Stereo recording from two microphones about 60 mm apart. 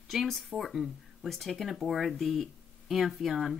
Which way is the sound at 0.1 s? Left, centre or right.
Centre.